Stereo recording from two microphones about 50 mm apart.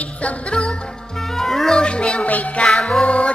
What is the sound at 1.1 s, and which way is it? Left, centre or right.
Music, centre.